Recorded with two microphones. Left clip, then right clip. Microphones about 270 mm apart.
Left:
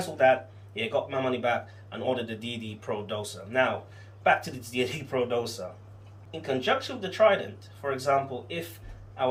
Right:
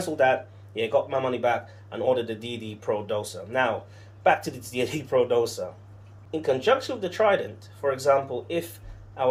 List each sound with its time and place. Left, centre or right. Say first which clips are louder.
0.2 s speech: even; right